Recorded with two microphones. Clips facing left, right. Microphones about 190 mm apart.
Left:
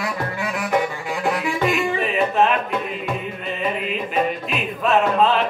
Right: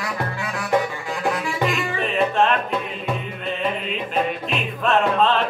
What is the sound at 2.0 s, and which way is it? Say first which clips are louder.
Music: right 2 dB; 5° left (ahead or behind).